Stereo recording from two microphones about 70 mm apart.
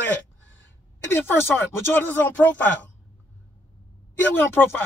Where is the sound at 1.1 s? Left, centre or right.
Left.